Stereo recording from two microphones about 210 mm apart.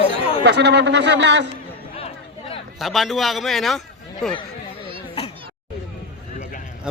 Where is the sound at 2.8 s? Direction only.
Centre (ahead or behind).